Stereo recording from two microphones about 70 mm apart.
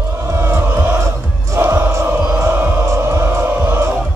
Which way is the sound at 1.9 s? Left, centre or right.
Right.